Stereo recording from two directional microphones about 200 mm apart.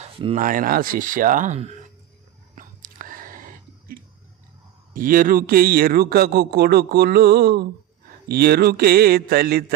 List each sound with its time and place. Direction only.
0.0 s a sound: 25° right (ahead or behind)
0.3 s speech: 40° right (ahead or behind)
2.6 s whispering: 45° right (ahead or behind)
4.9 s speech: 45° right (ahead or behind)